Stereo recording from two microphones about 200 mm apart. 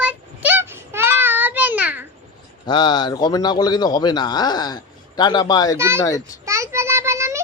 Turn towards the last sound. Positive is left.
turn(degrees=-15)  # may be behind; listen again after turning